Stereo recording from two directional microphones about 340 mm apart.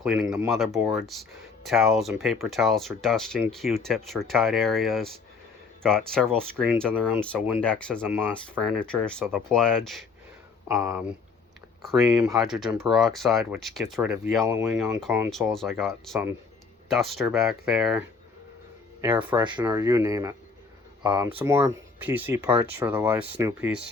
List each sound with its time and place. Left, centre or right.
0.0 s speech: centre
19.0 s speech: centre